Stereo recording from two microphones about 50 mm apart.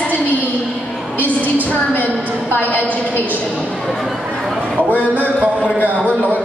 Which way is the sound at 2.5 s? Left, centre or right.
Left.